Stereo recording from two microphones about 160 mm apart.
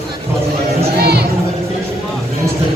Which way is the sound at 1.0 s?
90° right.